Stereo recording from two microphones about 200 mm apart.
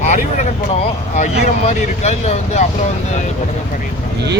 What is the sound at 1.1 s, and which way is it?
Speech, 35° left (ahead or behind).